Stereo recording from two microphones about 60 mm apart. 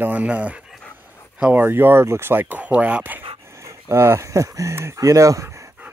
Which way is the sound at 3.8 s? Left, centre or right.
Right.